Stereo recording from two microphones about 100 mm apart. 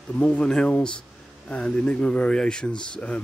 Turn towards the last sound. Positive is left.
turn(degrees=10)  # may be behind; listen again after turning